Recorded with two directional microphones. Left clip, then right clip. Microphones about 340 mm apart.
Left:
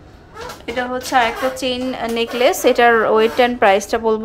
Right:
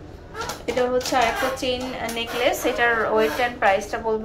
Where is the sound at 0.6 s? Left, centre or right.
Centre.